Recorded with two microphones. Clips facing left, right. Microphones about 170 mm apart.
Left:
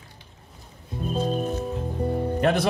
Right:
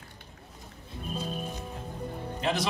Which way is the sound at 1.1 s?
60° left (ahead or behind).